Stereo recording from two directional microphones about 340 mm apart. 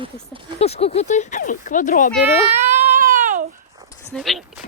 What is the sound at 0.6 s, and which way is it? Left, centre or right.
Speech, centre.